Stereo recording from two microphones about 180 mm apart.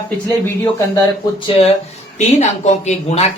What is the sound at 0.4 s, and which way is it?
Speech, 10° left (ahead or behind).